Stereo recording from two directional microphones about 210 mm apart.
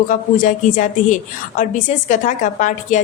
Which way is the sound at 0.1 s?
40° left (ahead or behind).